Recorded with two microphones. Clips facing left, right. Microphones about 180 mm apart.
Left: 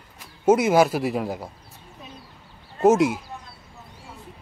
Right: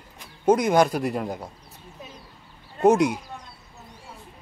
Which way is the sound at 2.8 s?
Centre (ahead or behind).